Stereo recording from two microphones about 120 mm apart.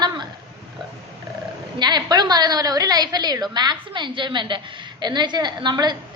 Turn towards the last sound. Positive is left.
turn(degrees=-40)  # may be behind; listen again after turning